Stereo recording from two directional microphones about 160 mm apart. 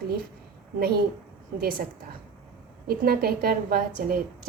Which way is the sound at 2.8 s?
75° right (ahead or behind).